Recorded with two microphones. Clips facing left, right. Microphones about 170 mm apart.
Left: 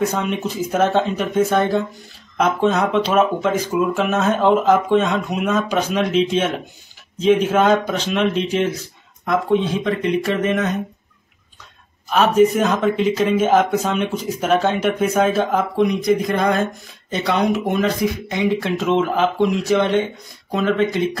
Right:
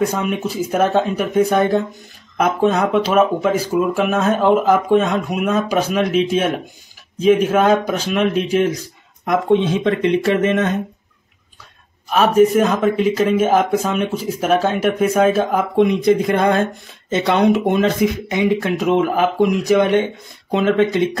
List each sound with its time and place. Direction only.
0.0 s speech: 10° right (ahead or behind)
7.2 s speech: 10° right (ahead or behind)
9.2 s speech: 20° right (ahead or behind)
12.1 s speech: 10° right (ahead or behind)
15.7 s speech: 25° right (ahead or behind)